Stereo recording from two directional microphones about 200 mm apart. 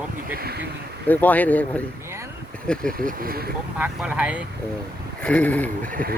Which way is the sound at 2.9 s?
45° right (ahead or behind).